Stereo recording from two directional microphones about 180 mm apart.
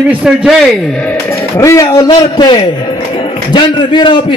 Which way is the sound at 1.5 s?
15° left (ahead or behind).